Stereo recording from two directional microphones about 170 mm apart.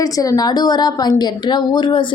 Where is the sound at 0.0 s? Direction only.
20° left (ahead or behind).